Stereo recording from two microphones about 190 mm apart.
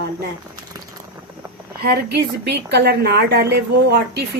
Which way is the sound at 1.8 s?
55° right (ahead or behind).